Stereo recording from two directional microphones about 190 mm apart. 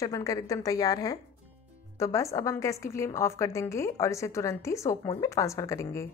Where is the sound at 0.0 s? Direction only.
15° left (ahead or behind).